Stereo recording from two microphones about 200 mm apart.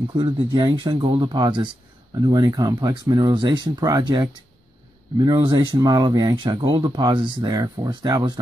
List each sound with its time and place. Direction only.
0.1 s speech: 25° right (ahead or behind)